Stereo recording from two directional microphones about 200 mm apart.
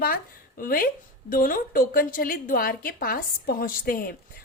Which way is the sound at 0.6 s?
45° left (ahead or behind).